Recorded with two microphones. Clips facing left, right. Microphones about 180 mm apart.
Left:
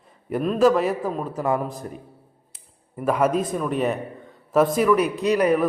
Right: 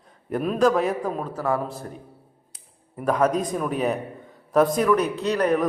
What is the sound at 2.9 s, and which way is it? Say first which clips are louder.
A man's voice: left 1 dB; 5° left (ahead or behind).